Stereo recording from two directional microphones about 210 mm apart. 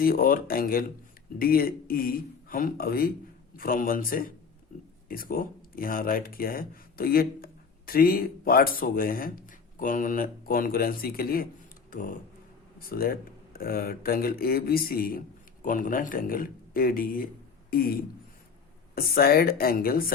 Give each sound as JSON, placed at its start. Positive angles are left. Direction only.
{"t": 0.0, "sound": "speech", "side_deg": 45}
{"t": 18.9, "sound": "speech", "side_deg": 45}